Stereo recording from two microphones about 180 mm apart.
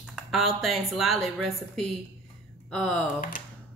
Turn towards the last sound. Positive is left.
turn(degrees=50)  # may be behind; listen again after turning